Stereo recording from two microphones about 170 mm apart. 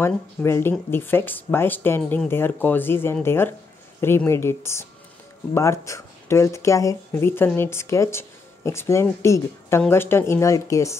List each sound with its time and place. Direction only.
0.0 s speech: 15° left (ahead or behind)